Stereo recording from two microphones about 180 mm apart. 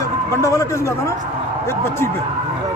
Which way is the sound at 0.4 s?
20° left (ahead or behind).